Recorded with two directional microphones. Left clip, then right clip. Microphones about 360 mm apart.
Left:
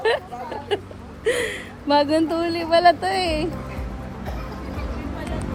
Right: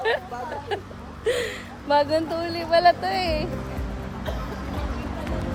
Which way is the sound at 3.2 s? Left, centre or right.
Centre.